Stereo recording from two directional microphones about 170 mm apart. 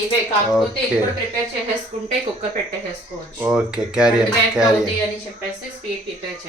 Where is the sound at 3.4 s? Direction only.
5° right (ahead or behind).